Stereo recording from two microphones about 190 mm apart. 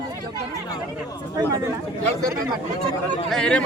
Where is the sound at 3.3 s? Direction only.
5° left (ahead or behind).